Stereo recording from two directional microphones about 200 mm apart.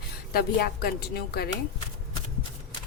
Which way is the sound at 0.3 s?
50° left (ahead or behind).